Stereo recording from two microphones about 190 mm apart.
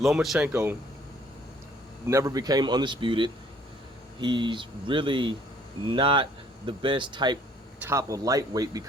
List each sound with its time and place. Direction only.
0.0 s speech: centre (ahead or behind)
2.0 s speech: 15° right (ahead or behind)